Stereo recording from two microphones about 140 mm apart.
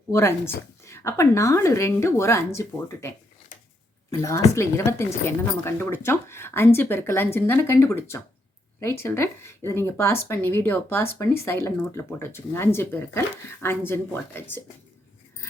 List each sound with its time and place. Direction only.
0.1 s speech: 20° left (ahead or behind)